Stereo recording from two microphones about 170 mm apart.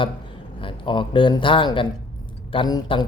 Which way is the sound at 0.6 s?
30° left (ahead or behind).